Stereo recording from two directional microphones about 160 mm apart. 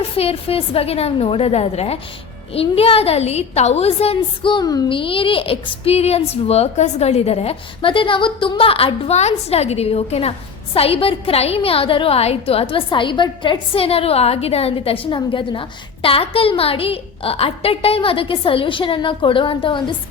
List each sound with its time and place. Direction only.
0.0 s a woman's voice: 40° left (ahead or behind)